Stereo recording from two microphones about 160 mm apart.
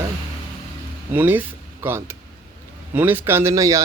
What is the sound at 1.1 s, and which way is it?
Speech, 10° right (ahead or behind).